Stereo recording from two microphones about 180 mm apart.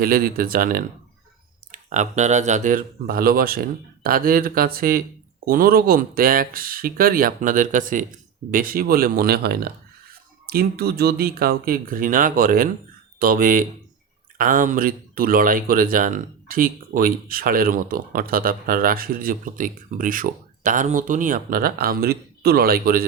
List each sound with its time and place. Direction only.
0.0 s speech: 55° right (ahead or behind)